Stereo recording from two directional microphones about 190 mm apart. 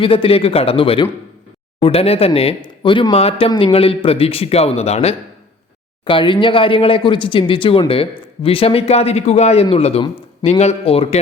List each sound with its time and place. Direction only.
0.0 s speech: 30° left (ahead or behind)